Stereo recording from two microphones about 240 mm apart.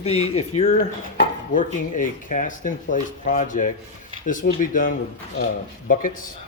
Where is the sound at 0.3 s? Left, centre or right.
Left.